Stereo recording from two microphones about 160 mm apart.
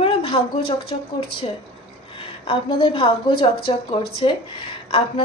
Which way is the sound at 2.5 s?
30° left (ahead or behind).